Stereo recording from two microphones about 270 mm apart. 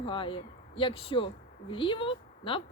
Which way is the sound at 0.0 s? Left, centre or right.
Centre.